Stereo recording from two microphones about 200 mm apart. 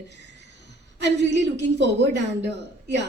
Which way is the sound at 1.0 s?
60° right (ahead or behind).